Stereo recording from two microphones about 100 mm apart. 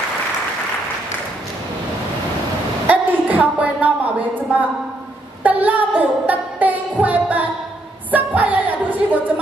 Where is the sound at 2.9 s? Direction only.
15° right (ahead or behind).